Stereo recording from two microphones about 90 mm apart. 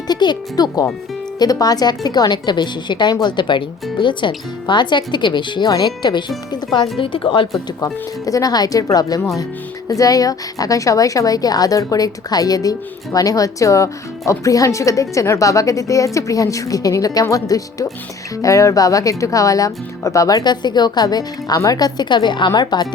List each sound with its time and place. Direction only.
0.1 s speech: 55° left (ahead or behind)
7.0 s a woman's voice: 70° left (ahead or behind)
8.2 s speech: 40° left (ahead or behind)